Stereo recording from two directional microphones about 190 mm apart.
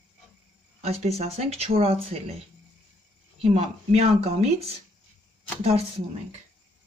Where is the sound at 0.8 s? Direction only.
35° right (ahead or behind).